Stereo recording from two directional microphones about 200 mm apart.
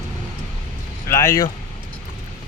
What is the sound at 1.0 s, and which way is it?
Speech, 15° left (ahead or behind).